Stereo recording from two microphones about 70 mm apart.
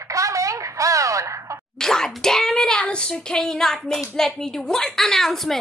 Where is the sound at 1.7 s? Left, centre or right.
Centre.